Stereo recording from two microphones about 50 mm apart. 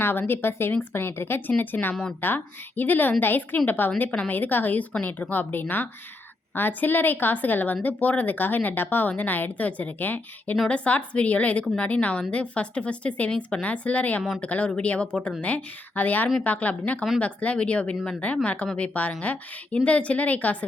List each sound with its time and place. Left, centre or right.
0.0 s speech: left
10.7 s a woman's voice: left